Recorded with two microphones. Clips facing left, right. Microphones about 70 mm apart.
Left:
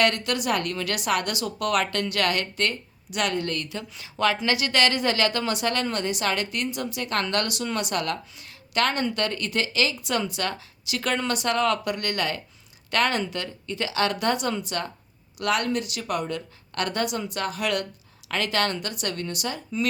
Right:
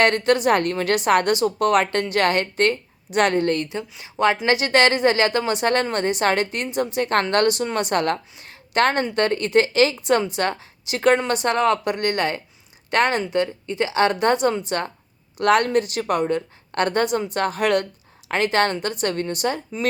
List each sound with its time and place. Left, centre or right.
0.0 s speech: right